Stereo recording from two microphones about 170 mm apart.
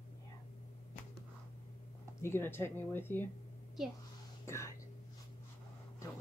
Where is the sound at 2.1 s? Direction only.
15° left (ahead or behind).